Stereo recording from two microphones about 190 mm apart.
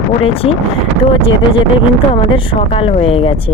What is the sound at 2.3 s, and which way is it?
Speech, 30° left (ahead or behind).